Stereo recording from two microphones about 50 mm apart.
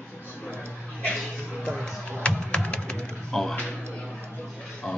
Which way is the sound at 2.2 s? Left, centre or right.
Left.